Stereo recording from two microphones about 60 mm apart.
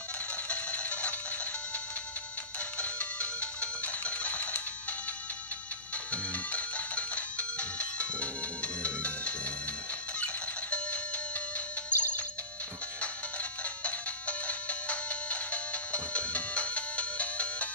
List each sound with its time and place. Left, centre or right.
0.5 s music: left
2.8 s music: left
6.1 s music: left